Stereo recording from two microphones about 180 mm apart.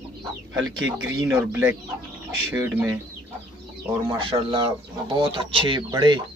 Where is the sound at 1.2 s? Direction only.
15° right (ahead or behind).